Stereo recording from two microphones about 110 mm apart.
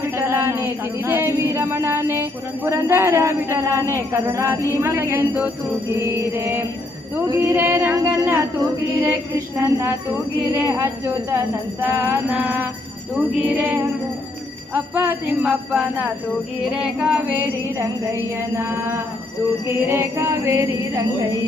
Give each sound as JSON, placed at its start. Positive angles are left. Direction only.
{"t": 0.2, "sound": "music", "side_deg": -20}
{"t": 7.9, "sound": "female singing", "side_deg": -35}
{"t": 9.6, "sound": "music", "side_deg": -25}
{"t": 12.3, "sound": "jingle bell", "side_deg": -15}
{"t": 16.6, "sound": "music", "side_deg": -5}
{"t": 17.3, "sound": "music", "side_deg": -20}